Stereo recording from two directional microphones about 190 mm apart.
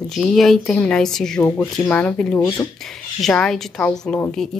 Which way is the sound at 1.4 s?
15° left (ahead or behind).